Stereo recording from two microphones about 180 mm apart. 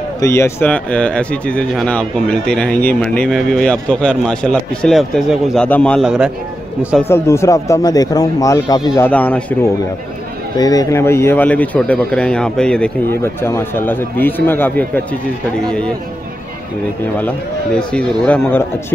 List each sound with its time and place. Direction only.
0.2 s speech: 15° left (ahead or behind); by 6.3 s 5° right (ahead or behind)
7.1 s speech: 15° left (ahead or behind)
10.6 s speech: 20° left (ahead or behind)
17.7 s speech: 5° left (ahead or behind)